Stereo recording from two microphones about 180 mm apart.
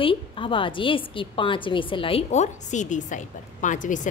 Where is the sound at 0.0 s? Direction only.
30° left (ahead or behind).